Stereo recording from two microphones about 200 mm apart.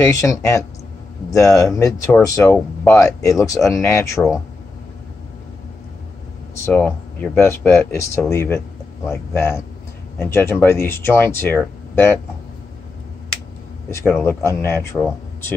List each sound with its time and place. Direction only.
0.0 s speech: 15° left (ahead or behind)
6.6 s speech: 5° left (ahead or behind)
13.8 s speech: 15° left (ahead or behind)